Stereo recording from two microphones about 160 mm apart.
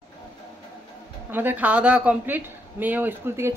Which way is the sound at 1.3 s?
10° right (ahead or behind).